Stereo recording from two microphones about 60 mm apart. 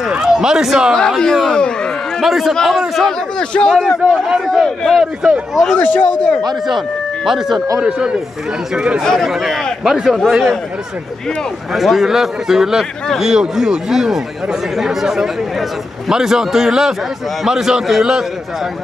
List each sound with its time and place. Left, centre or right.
0.1 s a sound: centre
0.9 s speech: centre
2.2 s a man's voice: centre
3.3 s speech: centre
3.8 s a man's voice: centre
5.0 s speech: centre
5.8 s speech: left
7.2 s speech: centre
9.0 s a man's voice: centre
9.3 s a man's voice: centre
11.7 s speech: centre